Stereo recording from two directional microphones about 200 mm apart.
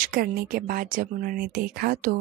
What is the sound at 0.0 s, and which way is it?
Speech, 45° right (ahead or behind).